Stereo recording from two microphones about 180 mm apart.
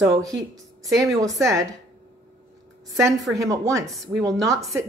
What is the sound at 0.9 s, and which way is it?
Speech, centre (ahead or behind).